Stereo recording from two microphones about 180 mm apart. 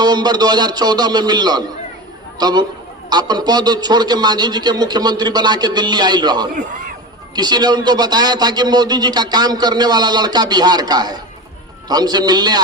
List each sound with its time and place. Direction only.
0.0 s speech: 25° right (ahead or behind)